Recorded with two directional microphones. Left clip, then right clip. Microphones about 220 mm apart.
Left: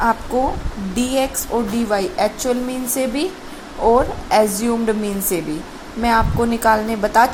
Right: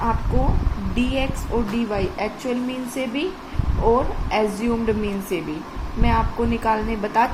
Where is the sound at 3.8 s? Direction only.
25° left (ahead or behind).